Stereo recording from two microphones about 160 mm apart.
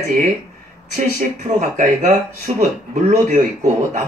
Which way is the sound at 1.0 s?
50° right (ahead or behind).